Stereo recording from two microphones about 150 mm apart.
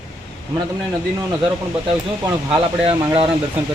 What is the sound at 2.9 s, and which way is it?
Speech, 35° right (ahead or behind).